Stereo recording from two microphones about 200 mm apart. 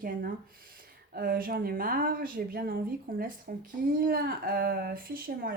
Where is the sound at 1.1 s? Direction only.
50° right (ahead or behind).